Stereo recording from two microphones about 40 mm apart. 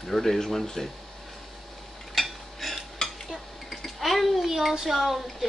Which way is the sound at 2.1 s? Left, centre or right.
Centre.